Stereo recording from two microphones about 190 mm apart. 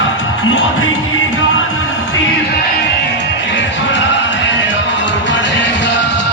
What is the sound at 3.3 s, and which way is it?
Music, 70° left (ahead or behind).